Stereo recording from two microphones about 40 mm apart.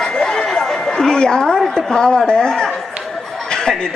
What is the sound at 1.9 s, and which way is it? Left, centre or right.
Chuckle, centre.